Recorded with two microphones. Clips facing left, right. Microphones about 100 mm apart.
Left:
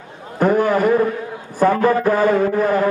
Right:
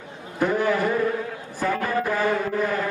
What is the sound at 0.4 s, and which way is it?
A man's voice, 45° left (ahead or behind).